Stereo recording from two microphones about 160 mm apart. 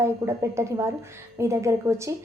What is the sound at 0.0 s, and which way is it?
A woman's voice, 15° right (ahead or behind).